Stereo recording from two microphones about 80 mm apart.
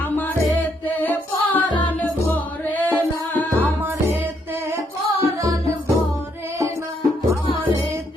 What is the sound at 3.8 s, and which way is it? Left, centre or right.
Music, right.